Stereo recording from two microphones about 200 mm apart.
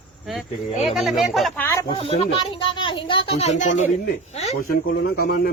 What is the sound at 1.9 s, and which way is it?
A woman's voice, 30° left (ahead or behind).